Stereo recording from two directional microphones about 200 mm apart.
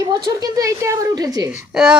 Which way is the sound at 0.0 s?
20° right (ahead or behind).